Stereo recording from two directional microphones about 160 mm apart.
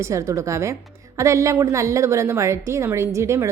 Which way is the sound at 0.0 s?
20° right (ahead or behind).